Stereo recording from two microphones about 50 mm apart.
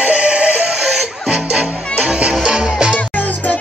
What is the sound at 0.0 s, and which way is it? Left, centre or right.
Music, right.